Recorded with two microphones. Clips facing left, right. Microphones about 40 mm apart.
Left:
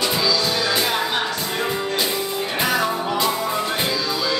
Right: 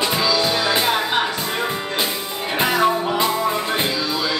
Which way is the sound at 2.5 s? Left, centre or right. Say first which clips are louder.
Right 4 dB; right.